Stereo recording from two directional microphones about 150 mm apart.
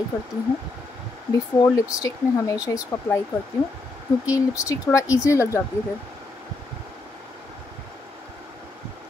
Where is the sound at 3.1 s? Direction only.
5° left (ahead or behind).